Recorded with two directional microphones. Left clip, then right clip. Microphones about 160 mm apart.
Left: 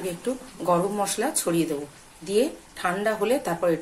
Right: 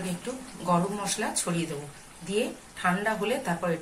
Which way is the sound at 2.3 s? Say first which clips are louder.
Left 6 dB; 70° left (ahead or behind).